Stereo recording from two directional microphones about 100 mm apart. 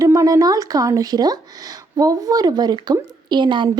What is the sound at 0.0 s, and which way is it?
A woman's voice, 35° right (ahead or behind).